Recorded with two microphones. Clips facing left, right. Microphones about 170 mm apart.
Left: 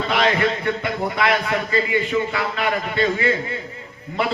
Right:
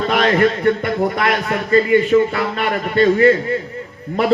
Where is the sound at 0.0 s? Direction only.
50° right (ahead or behind).